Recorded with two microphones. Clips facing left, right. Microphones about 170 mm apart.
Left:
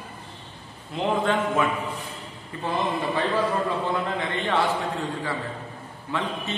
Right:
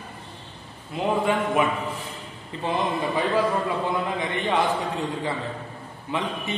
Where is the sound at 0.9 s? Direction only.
10° right (ahead or behind).